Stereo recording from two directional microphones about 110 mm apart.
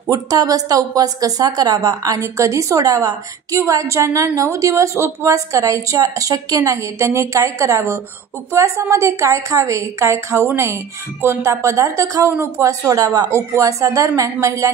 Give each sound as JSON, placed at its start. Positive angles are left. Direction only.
{"t": 0.0, "sound": "a woman's voice", "side_deg": -35}